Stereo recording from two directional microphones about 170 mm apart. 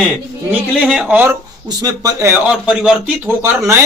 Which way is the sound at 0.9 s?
5° right (ahead or behind).